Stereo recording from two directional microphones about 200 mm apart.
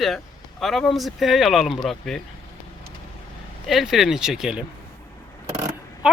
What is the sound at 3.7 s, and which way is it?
Speech, centre (ahead or behind).